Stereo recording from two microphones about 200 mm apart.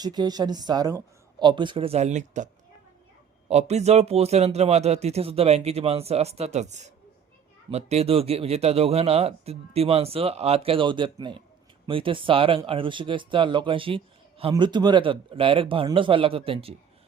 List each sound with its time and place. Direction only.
0.0 s speech: 20° right (ahead or behind); by 2.5 s 35° right (ahead or behind)
3.5 s speech: 35° right (ahead or behind)